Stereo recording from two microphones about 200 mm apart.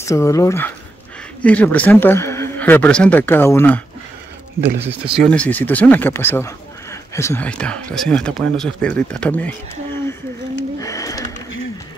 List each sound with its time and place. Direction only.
0.0 s speech: 15° left (ahead or behind)
4.7 s speech: 5° right (ahead or behind)
10.8 s a sound: 15° left (ahead or behind)